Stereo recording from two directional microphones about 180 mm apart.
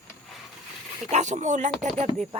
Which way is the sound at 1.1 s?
40° right (ahead or behind).